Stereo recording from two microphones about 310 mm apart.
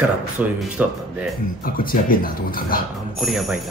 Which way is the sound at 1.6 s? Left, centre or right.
Left.